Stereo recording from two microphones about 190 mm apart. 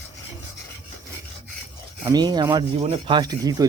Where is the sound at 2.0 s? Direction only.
20° right (ahead or behind).